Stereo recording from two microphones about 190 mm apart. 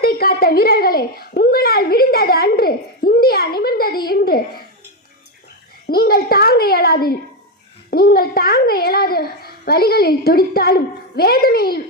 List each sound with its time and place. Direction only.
0.0 s a child's voice: 55° left (ahead or behind)
5.9 s a child's voice: 55° left (ahead or behind)